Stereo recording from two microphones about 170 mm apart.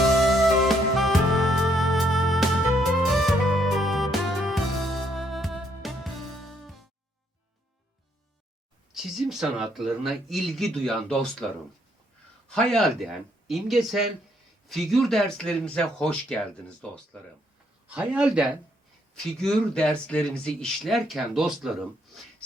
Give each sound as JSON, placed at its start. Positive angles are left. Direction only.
{"t": 0.6, "sound": "music", "side_deg": 0}
{"t": 8.9, "sound": "speech", "side_deg": 0}
{"t": 12.5, "sound": "speech", "side_deg": 5}
{"t": 17.8, "sound": "a man's voice", "side_deg": -10}
{"t": 19.1, "sound": "speech", "side_deg": 5}